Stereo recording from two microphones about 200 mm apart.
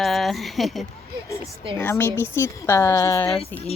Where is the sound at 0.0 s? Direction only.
Centre (ahead or behind).